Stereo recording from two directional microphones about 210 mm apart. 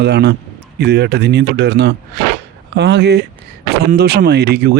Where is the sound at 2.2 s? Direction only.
55° right (ahead or behind).